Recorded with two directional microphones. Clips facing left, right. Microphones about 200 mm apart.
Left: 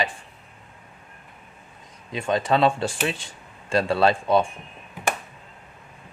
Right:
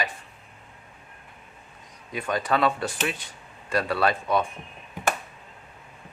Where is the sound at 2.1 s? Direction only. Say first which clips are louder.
Left 4 dB; 25° left (ahead or behind).